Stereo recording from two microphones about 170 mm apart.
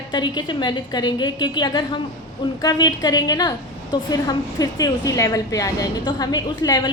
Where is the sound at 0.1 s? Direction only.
25° left (ahead or behind).